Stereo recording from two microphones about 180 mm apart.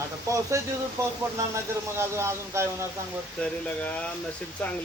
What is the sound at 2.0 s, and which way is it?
Speech, 15° right (ahead or behind).